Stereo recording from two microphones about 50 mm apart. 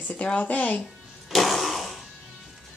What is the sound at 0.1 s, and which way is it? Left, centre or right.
Speech, left.